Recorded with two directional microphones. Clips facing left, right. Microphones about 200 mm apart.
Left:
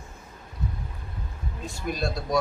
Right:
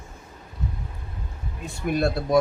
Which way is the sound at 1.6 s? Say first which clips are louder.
Right 6 dB; 60° right (ahead or behind).